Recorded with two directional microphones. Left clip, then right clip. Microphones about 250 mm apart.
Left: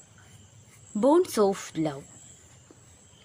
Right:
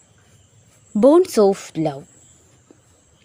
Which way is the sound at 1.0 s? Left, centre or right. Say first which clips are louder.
Right 9 dB; right.